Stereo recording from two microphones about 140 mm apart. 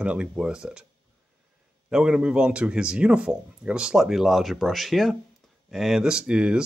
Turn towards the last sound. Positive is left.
turn(degrees=-5)  # may be behind; listen again after turning